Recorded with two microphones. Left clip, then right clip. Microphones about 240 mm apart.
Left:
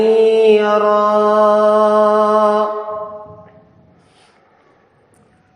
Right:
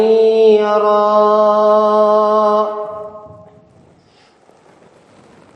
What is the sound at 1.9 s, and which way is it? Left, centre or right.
Music, left.